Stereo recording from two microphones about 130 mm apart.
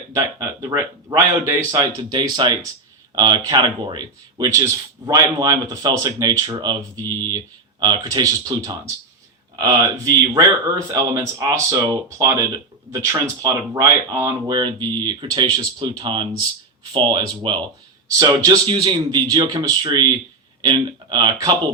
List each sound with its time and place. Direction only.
0.1 s speech: 25° right (ahead or behind)
2.0 s speech: 35° right (ahead or behind)
18.6 s speech: 40° right (ahead or behind)